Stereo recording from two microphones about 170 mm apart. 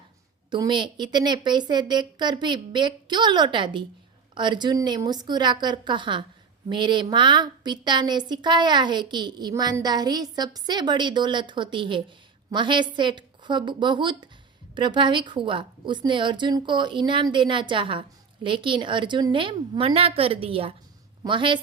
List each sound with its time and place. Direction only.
0.5 s a woman's voice: 25° right (ahead or behind)